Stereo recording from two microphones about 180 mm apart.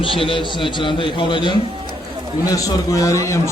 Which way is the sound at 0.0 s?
30° left (ahead or behind).